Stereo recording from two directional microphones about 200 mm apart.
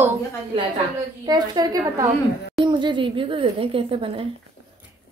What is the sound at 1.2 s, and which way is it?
Speech, 20° right (ahead or behind).